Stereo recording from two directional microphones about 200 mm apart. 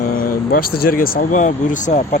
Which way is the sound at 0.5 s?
50° left (ahead or behind).